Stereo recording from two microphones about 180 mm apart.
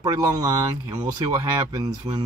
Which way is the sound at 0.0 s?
20° right (ahead or behind).